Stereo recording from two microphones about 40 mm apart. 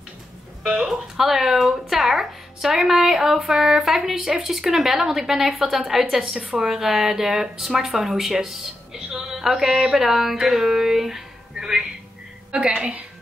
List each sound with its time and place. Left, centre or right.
0.7 s a woman's voice: centre
12.4 s a woman's voice: right